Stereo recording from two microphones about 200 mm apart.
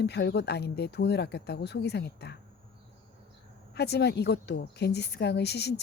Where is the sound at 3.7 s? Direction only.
55° left (ahead or behind).